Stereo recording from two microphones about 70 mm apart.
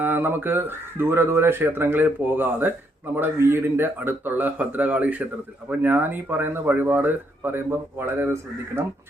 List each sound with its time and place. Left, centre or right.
0.0 s speech: right